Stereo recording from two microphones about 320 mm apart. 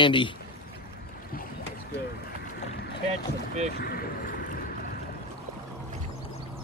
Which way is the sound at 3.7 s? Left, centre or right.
Left.